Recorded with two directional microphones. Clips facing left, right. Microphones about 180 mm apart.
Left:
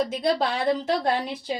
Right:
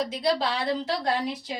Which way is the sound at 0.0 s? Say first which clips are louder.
Left 2 dB; 50° left (ahead or behind).